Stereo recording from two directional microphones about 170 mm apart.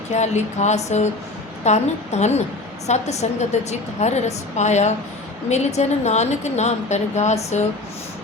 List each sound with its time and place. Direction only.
0.1 s a woman's voice: 40° left (ahead or behind)